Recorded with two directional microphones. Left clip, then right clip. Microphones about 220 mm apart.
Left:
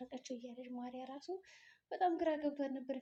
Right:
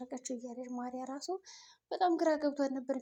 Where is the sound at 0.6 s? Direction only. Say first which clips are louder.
Right 6 dB; 25° right (ahead or behind).